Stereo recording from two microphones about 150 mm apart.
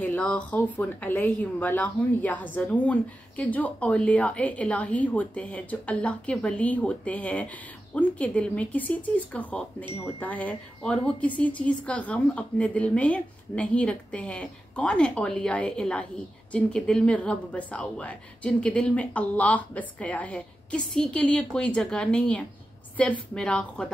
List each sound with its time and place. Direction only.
0.0 s speech: 10° left (ahead or behind)